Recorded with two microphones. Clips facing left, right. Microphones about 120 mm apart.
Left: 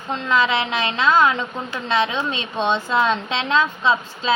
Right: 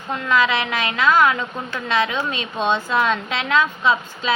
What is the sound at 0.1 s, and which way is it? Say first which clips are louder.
A woman's voice: even; 25° left (ahead or behind).